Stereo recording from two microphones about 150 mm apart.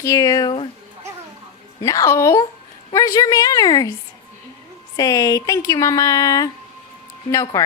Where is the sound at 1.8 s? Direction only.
20° left (ahead or behind).